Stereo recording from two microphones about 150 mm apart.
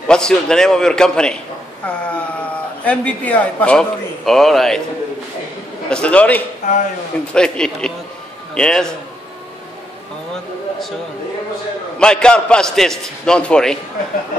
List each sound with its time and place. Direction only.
0.1 s a man's voice: 5° left (ahead or behind)
5.9 s a man's voice: 5° left (ahead or behind)
12.0 s a man's voice: 5° left (ahead or behind)